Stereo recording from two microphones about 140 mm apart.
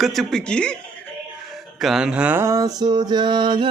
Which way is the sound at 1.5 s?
Centre (ahead or behind).